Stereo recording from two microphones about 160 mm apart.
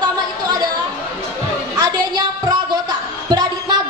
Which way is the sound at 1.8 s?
25° right (ahead or behind).